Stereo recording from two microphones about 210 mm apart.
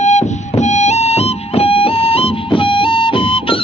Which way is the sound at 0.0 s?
35° left (ahead or behind).